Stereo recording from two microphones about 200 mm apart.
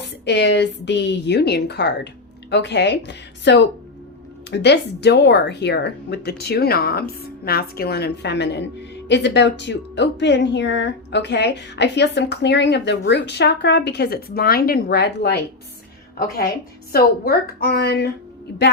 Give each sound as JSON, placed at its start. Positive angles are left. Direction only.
{"t": 0.0, "sound": "a woman's voice", "side_deg": 60}
{"t": 16.9, "sound": "a woman's voice", "side_deg": 50}